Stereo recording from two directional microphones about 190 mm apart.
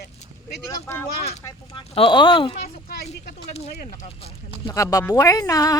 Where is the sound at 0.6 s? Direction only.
15° left (ahead or behind).